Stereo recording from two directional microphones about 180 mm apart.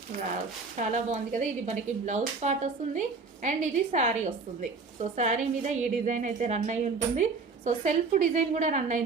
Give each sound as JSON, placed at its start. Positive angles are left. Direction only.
{"t": 0.8, "sound": "a woman's voice", "side_deg": -45}